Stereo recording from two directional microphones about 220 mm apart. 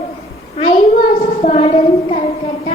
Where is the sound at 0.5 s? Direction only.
20° left (ahead or behind).